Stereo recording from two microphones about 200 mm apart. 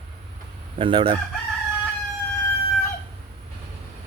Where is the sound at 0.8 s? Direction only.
25° right (ahead or behind).